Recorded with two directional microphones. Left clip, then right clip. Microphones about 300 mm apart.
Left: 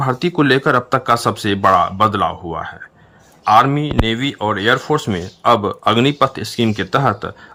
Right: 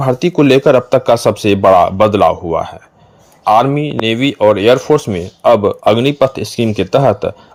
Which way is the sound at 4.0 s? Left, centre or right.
Centre.